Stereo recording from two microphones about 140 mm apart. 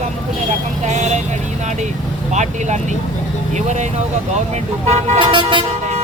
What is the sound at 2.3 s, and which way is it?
Speech, 55° right (ahead or behind).